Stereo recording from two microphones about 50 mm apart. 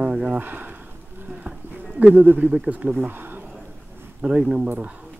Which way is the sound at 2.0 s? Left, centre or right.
Right.